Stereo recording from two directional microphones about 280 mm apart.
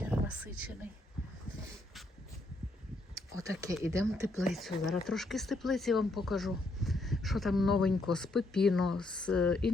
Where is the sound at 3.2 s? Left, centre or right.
Centre.